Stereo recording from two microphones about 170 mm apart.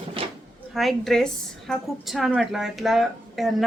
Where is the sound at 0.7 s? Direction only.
Centre (ahead or behind).